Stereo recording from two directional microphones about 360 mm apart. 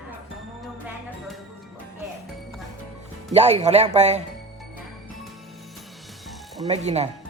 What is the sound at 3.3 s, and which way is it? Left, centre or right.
Speech, centre.